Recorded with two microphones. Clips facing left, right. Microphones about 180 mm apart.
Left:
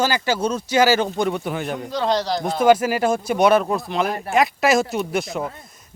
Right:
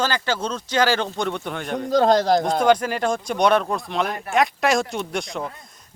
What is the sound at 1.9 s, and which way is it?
Speech, 45° right (ahead or behind).